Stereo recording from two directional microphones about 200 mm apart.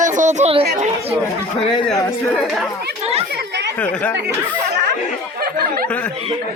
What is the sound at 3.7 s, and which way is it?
Speech, 5° left (ahead or behind).